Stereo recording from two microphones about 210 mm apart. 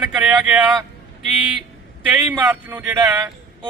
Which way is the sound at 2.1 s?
5° right (ahead or behind).